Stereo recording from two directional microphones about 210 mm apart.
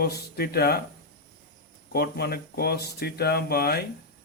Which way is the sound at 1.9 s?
50° left (ahead or behind).